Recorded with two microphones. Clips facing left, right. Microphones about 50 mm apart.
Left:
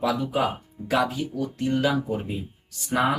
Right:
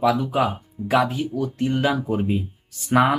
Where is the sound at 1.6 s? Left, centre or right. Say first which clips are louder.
Right 1 dB; right.